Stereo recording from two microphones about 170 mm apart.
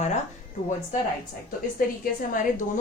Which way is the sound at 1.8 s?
55° left (ahead or behind).